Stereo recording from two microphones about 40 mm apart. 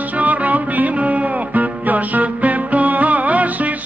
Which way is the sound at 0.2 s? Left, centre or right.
Right.